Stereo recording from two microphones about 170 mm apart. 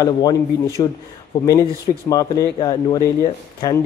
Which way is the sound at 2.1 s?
20° left (ahead or behind).